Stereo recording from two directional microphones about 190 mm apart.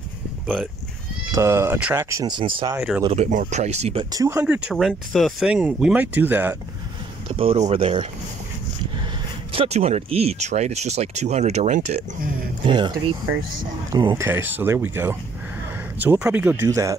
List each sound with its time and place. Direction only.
1.3 s speech: 15° right (ahead or behind)
3.2 s speech: 40° right (ahead or behind); by 6.5 s 10° right (ahead or behind)
7.2 s speech: 30° right (ahead or behind)
9.5 s speech: 30° right (ahead or behind)
12.6 s speech: 25° right (ahead or behind)
13.9 s speech: 20° right (ahead or behind)